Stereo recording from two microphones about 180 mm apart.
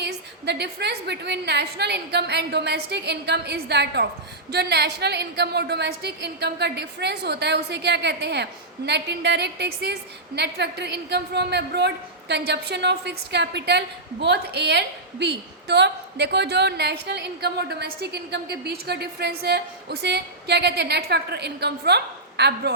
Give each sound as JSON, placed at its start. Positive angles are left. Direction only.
{"t": 0.0, "sound": "a woman's voice", "side_deg": -70}